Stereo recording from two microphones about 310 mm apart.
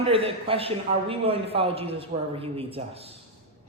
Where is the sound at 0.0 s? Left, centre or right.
Centre.